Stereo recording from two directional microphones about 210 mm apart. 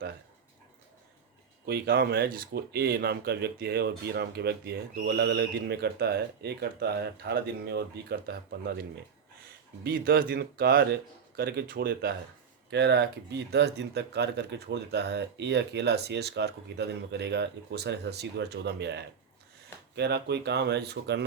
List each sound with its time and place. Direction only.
1.6 s speech: 50° right (ahead or behind)